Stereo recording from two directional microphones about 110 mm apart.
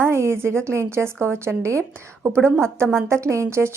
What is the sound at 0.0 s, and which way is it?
A woman's voice, 25° right (ahead or behind).